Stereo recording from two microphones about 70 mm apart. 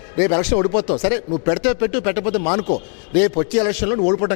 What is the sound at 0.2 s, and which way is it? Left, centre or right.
A man's voice, centre.